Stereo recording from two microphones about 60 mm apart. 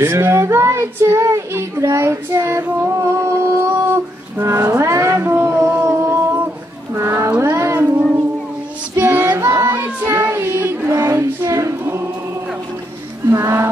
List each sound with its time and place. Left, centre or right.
0.0 s speech: right
4.6 s music: right
5.2 s a sound: right
5.9 s a sound: right
7.4 s music: right
8.9 s child singing: right
10.9 s child singing: right
11.8 s choir: right
13.3 s music: right